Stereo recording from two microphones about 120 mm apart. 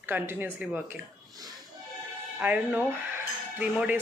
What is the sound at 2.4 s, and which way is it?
Speech, 15° right (ahead or behind).